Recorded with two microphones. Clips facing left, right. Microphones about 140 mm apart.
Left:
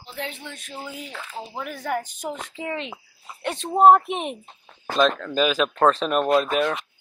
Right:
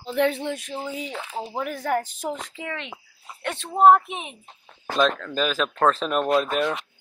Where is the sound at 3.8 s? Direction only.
45° left (ahead or behind).